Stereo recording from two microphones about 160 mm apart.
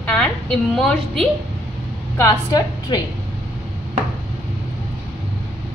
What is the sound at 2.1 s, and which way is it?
Speech, 20° left (ahead or behind).